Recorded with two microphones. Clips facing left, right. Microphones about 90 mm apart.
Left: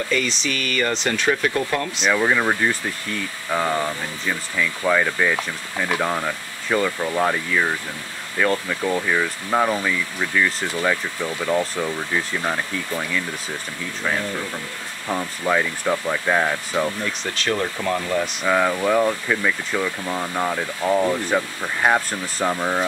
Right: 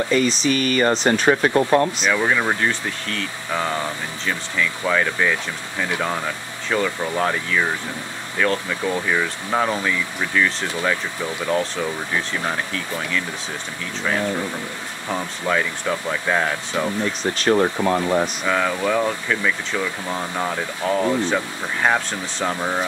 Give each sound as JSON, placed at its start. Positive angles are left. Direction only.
{"t": 0.1, "sound": "speech", "side_deg": -35}
{"t": 2.0, "sound": "speech", "side_deg": 5}
{"t": 15.0, "sound": "speech", "side_deg": 5}
{"t": 17.2, "sound": "speech", "side_deg": -35}
{"t": 18.4, "sound": "speech", "side_deg": 5}